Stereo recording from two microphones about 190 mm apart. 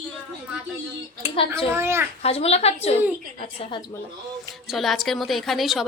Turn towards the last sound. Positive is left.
turn(degrees=0)  # may be behind; listen again after turning